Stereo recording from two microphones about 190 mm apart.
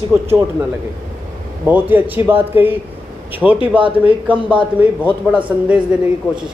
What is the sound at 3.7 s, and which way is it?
Speech, 25° right (ahead or behind).